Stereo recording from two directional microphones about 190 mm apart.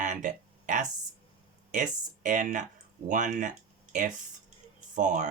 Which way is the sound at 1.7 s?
40° right (ahead or behind).